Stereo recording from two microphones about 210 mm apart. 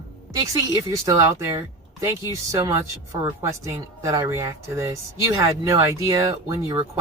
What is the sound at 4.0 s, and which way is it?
Speech, 15° right (ahead or behind).